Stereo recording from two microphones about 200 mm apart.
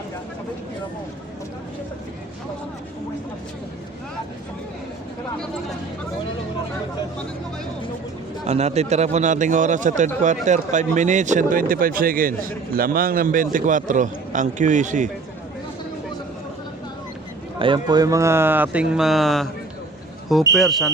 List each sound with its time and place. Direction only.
8.4 s speech: 35° right (ahead or behind)
17.6 s speech: 20° right (ahead or behind); by 19.5 s centre (ahead or behind)
20.6 s speech: centre (ahead or behind)